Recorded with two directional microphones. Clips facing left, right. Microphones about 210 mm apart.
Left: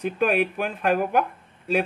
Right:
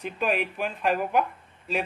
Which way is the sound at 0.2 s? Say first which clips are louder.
Left 4 dB; 55° left (ahead or behind).